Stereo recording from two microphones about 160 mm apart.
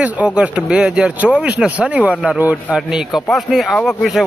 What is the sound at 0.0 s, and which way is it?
A man's voice, 10° right (ahead or behind).